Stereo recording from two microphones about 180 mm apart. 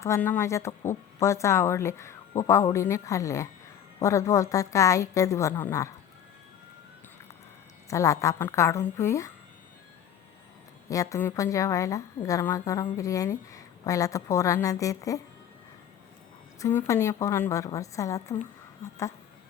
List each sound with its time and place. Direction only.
0.0 s a woman's voice: 15° left (ahead or behind)
7.9 s a woman's voice: 15° left (ahead or behind)
10.8 s a woman's voice: 20° left (ahead or behind)
16.6 s a woman's voice: 15° left (ahead or behind)